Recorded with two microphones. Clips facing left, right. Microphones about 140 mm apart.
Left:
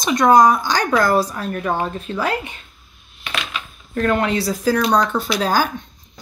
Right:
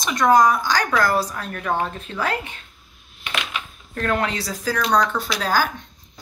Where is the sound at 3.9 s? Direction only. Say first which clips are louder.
Left 5 dB; 10° left (ahead or behind).